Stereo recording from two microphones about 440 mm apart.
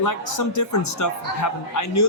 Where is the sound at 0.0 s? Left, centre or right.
Left.